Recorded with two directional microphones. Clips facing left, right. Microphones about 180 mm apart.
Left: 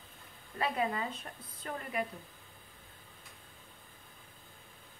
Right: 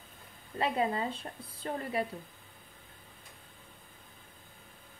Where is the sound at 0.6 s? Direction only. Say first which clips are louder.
Right 3 dB; 30° right (ahead or behind).